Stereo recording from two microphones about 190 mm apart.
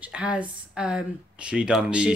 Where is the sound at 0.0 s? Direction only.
5° right (ahead or behind).